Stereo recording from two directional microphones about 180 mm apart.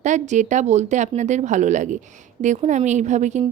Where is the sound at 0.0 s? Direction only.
40° right (ahead or behind).